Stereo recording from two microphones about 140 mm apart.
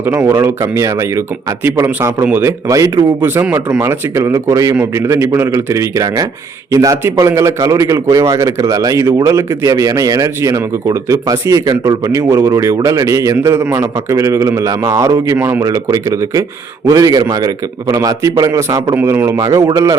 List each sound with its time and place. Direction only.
0.0 s a man's voice: 15° right (ahead or behind)